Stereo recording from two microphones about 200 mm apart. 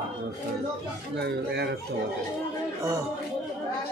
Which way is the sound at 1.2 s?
55° right (ahead or behind).